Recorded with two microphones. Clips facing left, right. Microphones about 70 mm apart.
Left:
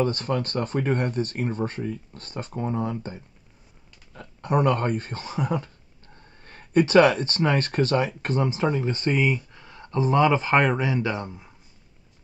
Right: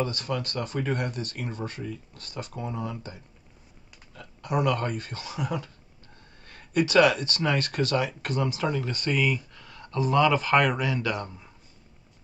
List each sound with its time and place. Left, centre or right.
0.0 s speech: left